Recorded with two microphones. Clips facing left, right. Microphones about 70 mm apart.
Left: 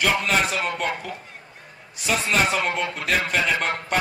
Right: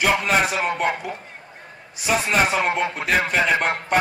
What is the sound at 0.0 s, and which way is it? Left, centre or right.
A man's voice, right.